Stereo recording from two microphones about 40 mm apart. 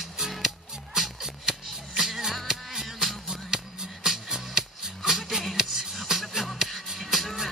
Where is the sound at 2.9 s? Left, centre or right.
Centre.